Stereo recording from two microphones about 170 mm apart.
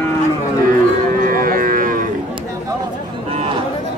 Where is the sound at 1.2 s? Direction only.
55° right (ahead or behind).